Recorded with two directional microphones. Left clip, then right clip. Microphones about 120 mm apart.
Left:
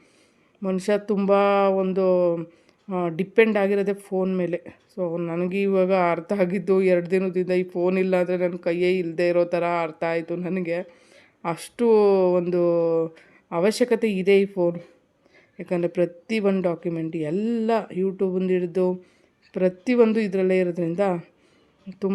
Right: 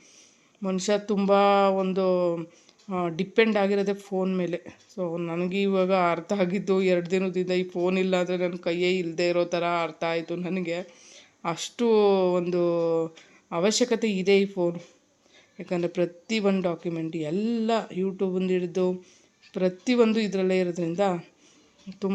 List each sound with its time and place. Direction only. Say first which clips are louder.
0.6 s speech: left 2 dB; 40° left (ahead or behind)